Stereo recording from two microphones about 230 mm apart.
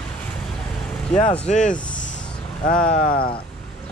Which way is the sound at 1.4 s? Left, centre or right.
Left.